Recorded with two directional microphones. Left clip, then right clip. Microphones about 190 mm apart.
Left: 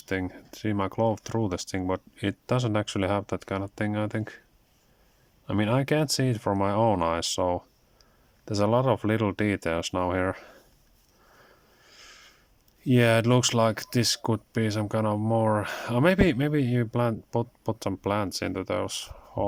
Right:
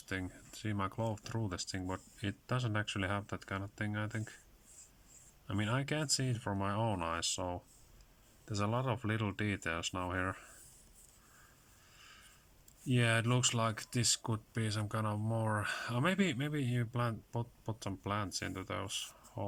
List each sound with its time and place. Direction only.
0.1 s speech: 35° left (ahead or behind)
5.5 s speech: 40° left (ahead or behind)
11.9 s a sound: 40° left (ahead or behind)
12.8 s speech: 40° left (ahead or behind)